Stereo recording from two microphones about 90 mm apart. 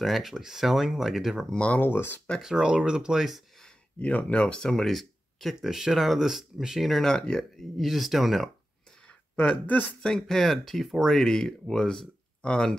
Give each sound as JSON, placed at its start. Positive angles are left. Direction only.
{"t": 0.0, "sound": "speech", "side_deg": 0}
{"t": 1.5, "sound": "speech", "side_deg": 15}
{"t": 2.4, "sound": "speech", "side_deg": -10}
{"t": 4.0, "sound": "speech", "side_deg": 15}
{"t": 9.4, "sound": "speech", "side_deg": 15}
{"t": 10.1, "sound": "speech", "side_deg": 5}